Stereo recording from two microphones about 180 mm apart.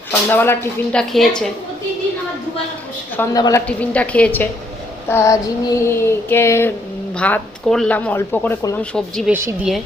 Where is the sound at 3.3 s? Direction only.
20° left (ahead or behind).